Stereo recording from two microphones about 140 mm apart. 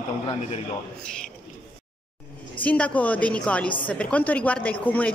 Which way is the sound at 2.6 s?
10° left (ahead or behind).